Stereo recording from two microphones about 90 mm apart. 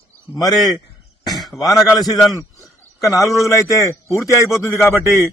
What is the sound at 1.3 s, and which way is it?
Speech, centre (ahead or behind).